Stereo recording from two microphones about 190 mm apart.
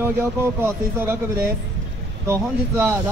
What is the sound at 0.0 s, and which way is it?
Speech, 10° right (ahead or behind).